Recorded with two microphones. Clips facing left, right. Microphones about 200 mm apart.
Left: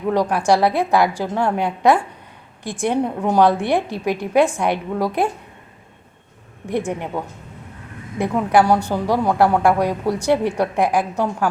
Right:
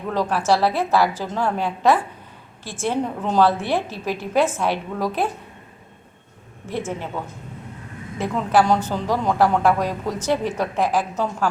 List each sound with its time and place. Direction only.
0.1 s a woman's voice: 15° left (ahead or behind)
6.7 s a woman's voice: 15° left (ahead or behind)
8.2 s a woman's voice: 10° left (ahead or behind)